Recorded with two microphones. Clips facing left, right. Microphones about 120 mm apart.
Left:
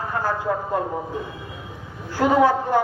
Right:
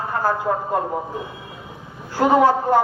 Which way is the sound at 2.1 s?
40° right (ahead or behind).